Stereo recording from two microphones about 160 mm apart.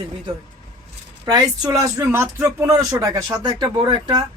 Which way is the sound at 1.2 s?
25° right (ahead or behind).